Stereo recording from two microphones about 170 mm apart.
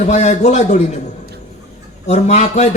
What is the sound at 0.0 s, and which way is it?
Speech, 45° left (ahead or behind).